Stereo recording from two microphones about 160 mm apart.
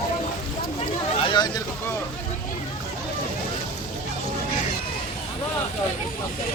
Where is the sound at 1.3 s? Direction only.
25° left (ahead or behind).